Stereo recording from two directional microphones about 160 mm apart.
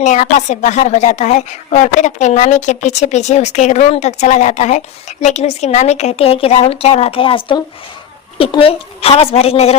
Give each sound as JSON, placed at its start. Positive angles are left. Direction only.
{"t": 0.0, "sound": "a woman's voice", "side_deg": 50}